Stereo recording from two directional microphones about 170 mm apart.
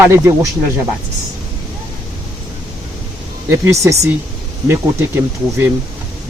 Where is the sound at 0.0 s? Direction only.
15° right (ahead or behind).